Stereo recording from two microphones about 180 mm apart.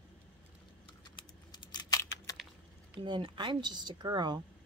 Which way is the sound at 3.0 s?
25° right (ahead or behind).